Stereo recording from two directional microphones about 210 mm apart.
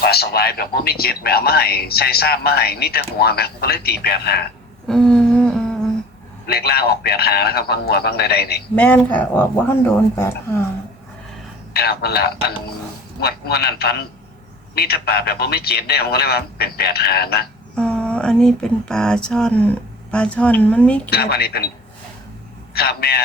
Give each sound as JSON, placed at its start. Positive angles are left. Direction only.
{"t": 0.0, "sound": "speech", "side_deg": 50}
{"t": 4.9, "sound": "humming", "side_deg": 5}
{"t": 6.5, "sound": "speech", "side_deg": 50}
{"t": 8.7, "sound": "speech", "side_deg": 5}
{"t": 11.7, "sound": "speech", "side_deg": 50}
{"t": 17.7, "sound": "speech", "side_deg": 5}
{"t": 21.1, "sound": "speech", "side_deg": 50}
{"t": 22.7, "sound": "speech", "side_deg": 50}